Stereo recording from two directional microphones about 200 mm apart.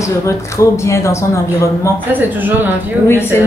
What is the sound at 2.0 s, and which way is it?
Speech, 10° right (ahead or behind).